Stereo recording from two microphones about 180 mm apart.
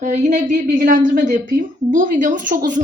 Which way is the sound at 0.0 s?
40° right (ahead or behind).